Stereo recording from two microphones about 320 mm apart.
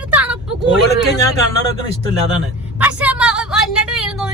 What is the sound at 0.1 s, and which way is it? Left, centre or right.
Vehicle, centre.